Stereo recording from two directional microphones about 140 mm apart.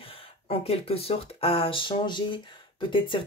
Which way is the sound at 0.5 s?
45° left (ahead or behind).